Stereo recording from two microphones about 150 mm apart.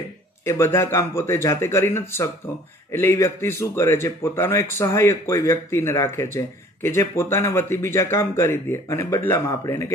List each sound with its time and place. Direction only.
0.5 s a man's voice: 15° left (ahead or behind)